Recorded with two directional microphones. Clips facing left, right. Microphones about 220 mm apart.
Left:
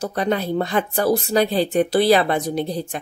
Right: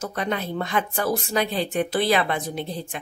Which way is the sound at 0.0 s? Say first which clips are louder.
Left 5 dB; 35° left (ahead or behind).